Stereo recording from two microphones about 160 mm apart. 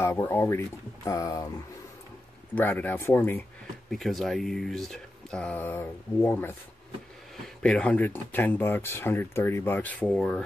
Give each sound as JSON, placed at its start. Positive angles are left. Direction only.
{"t": 0.0, "sound": "speech", "side_deg": 15}
{"t": 2.5, "sound": "speech", "side_deg": 10}
{"t": 3.9, "sound": "speech", "side_deg": 0}